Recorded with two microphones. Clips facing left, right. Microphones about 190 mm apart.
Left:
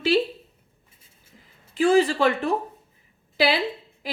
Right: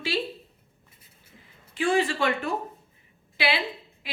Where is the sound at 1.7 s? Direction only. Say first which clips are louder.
Left 6 dB; 40° left (ahead or behind).